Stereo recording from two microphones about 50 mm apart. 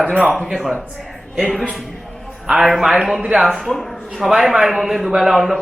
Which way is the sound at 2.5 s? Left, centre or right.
Centre.